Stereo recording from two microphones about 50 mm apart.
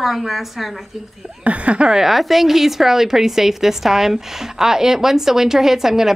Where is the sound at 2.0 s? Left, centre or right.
Centre.